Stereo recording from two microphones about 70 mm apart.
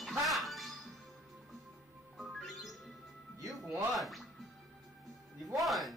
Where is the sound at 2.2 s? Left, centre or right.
Centre.